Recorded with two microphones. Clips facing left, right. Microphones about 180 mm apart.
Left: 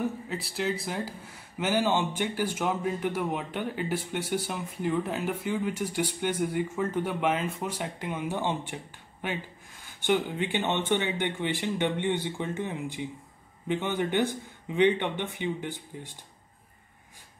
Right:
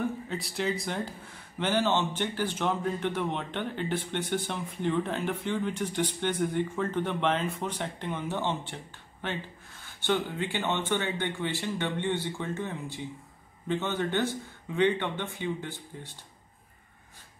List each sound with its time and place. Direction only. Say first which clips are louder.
0.0 s speech: even; centre (ahead or behind)
9.8 s speech: left 2 dB; 15° left (ahead or behind)